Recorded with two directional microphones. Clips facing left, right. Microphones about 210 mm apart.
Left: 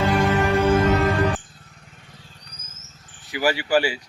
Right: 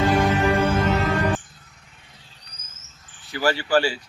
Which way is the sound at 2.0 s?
45° left (ahead or behind).